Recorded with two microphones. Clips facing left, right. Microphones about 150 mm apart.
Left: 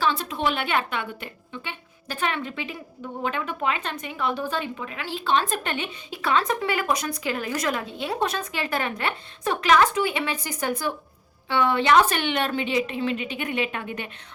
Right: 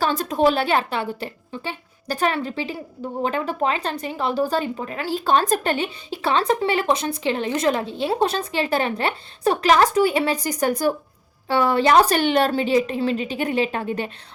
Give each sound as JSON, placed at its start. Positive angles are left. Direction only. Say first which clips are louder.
{"t": 0.0, "sound": "a woman's voice", "louder": "right 6 dB", "side_deg": -45}